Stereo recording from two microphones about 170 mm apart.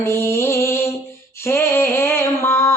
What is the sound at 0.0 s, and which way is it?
Music, 15° left (ahead or behind).